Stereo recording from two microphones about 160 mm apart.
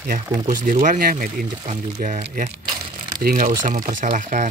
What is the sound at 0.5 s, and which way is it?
Speech, 55° right (ahead or behind).